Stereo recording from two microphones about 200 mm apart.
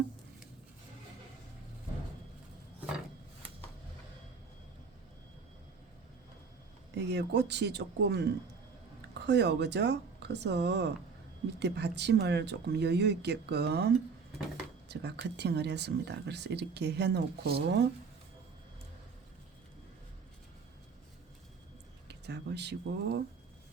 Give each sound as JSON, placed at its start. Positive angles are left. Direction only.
{"t": 6.9, "sound": "speech", "side_deg": -60}
{"t": 22.0, "sound": "speech", "side_deg": -60}